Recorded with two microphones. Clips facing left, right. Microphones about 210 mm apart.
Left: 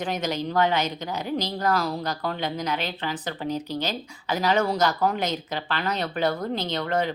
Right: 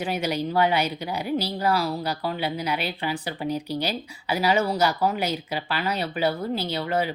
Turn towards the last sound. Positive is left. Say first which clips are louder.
# even
turn(degrees=-5)  # may be behind; listen again after turning